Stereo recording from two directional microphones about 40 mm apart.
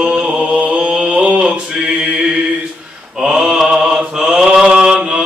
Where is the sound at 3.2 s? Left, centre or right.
Centre.